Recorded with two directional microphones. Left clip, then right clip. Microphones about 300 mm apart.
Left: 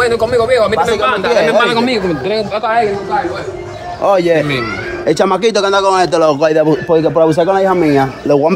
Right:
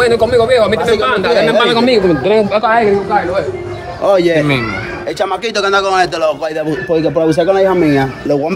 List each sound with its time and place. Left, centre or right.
0.0 s a man's voice: centre
2.5 s a man's voice: right
4.0 s speech: centre
5.0 s speech: left
5.5 s speech: centre
6.9 s speech: centre